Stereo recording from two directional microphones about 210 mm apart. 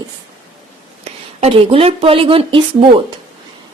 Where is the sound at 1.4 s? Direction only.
25° right (ahead or behind).